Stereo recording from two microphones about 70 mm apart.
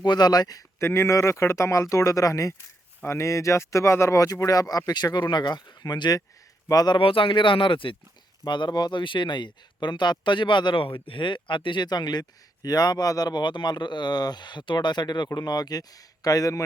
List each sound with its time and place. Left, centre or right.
0.0 s speech: left
0.8 s speech: left
4.9 s speech: left
8.4 s speech: left
12.6 s speech: left
15.4 s speech: left